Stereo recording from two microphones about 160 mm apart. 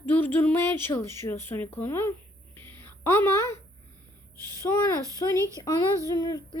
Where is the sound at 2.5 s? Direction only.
15° left (ahead or behind).